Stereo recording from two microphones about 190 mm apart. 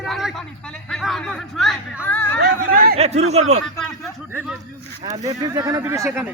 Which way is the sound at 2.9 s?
35° right (ahead or behind).